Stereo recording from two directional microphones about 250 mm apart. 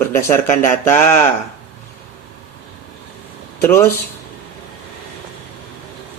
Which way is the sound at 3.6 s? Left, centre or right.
Centre.